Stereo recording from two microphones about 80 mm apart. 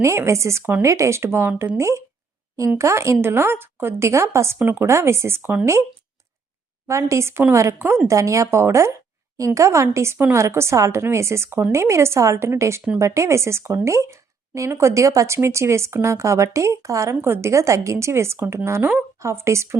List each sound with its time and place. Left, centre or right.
0.0 s speech: right
1.5 s speech: centre
1.8 s speech: right
4.9 s speech: right
6.8 s speech: right
17.2 s speech: right